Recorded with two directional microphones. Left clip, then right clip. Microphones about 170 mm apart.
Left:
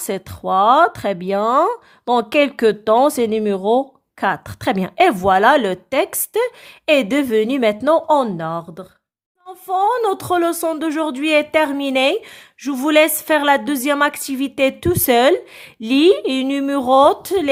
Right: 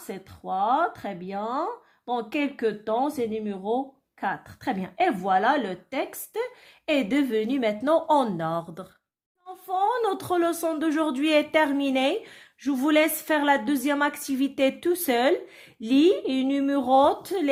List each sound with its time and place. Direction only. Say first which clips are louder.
0.1 s speech: left 12 dB; 55° left (ahead or behind); by 17.5 s 35° left (ahead or behind)